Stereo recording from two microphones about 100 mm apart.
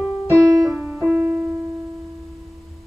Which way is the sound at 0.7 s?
15° right (ahead or behind).